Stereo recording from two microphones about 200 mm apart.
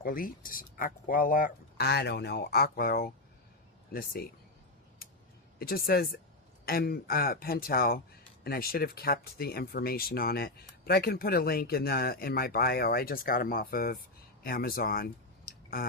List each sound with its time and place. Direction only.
0.0 s speech: 45° left (ahead or behind)
5.5 s speech: 50° left (ahead or behind)